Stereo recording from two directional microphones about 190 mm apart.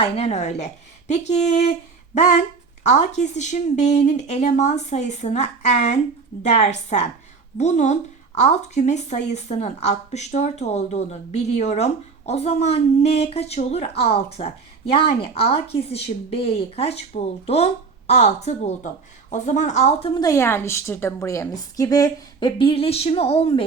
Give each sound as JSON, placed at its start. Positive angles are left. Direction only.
{"t": 0.0, "sound": "a woman's voice", "side_deg": 35}
{"t": 2.8, "sound": "a woman's voice", "side_deg": 35}